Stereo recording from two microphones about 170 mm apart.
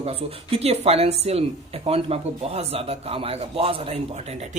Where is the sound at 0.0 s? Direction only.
35° right (ahead or behind).